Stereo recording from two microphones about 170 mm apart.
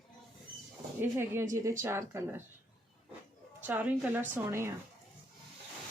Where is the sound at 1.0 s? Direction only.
15° right (ahead or behind).